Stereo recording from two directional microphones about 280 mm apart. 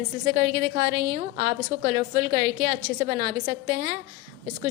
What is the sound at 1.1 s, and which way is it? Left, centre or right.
A woman's voice, centre.